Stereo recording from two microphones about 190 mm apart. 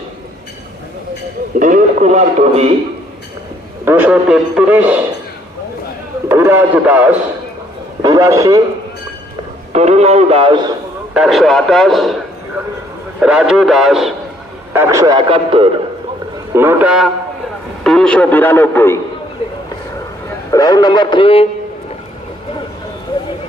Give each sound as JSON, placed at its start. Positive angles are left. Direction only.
{"t": 1.5, "sound": "a man's voice", "side_deg": -45}
{"t": 3.8, "sound": "a man's voice", "side_deg": -10}
{"t": 6.2, "sound": "a man's voice", "side_deg": -10}
{"t": 9.7, "sound": "a man's voice", "side_deg": -35}
{"t": 11.1, "sound": "a man's voice", "side_deg": 0}
{"t": 14.7, "sound": "a man's voice", "side_deg": -15}
{"t": 16.5, "sound": "a man's voice", "side_deg": -10}
{"t": 20.5, "sound": "speech", "side_deg": 20}